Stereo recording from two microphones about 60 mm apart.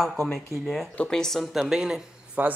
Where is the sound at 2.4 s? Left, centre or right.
Right.